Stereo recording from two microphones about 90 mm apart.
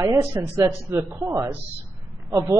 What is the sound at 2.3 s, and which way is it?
Speech, 40° right (ahead or behind).